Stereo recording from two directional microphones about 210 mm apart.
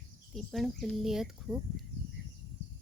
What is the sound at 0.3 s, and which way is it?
Speech, centre (ahead or behind).